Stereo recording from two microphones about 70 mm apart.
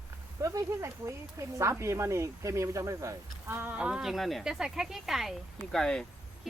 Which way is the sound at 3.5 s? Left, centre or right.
Right.